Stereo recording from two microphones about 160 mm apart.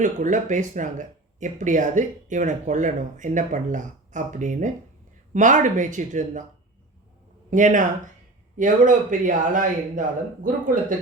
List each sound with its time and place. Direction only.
0.0 s speech: 50° right (ahead or behind)
7.5 s speech: 50° right (ahead or behind)